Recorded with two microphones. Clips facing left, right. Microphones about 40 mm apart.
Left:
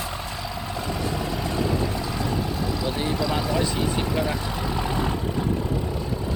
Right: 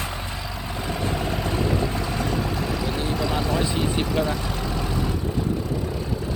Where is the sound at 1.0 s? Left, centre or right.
Right.